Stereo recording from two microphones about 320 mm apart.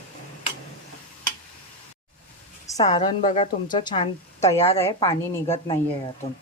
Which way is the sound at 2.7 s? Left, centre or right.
Centre.